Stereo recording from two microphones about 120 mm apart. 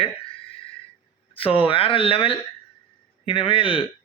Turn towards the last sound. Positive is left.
turn(degrees=50)  # may be behind; listen again after turning